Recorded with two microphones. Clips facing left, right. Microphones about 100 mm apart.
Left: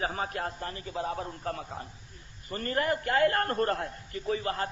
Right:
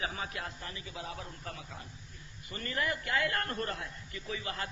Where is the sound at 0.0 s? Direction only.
40° left (ahead or behind).